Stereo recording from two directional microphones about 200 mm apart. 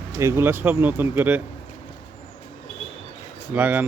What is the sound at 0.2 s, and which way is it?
Speech, 15° right (ahead or behind).